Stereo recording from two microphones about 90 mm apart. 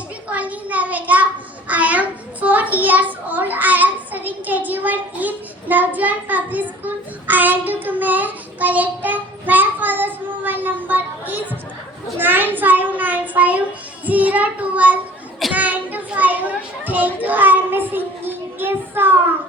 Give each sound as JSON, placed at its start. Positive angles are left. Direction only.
{"t": 0.3, "sound": "a sound", "side_deg": -15}
{"t": 12.1, "sound": "child singing", "side_deg": -20}
{"t": 15.5, "sound": "children playing", "side_deg": -15}